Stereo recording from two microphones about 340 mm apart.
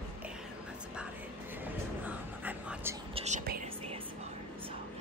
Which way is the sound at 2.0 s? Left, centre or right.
Centre.